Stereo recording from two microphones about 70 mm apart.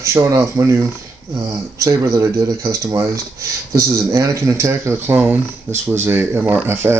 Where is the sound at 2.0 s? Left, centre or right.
Right.